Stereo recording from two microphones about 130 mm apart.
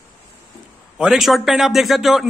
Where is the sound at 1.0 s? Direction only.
Centre (ahead or behind).